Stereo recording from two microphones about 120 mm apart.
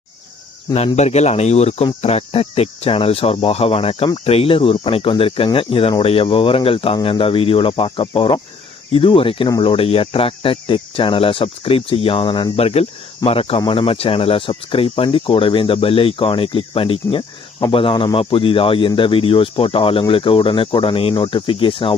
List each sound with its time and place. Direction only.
0.9 s speech: 70° left (ahead or behind); by 21.9 s 45° left (ahead or behind)